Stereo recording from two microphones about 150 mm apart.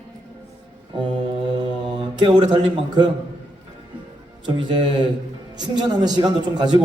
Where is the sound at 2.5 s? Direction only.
30° right (ahead or behind).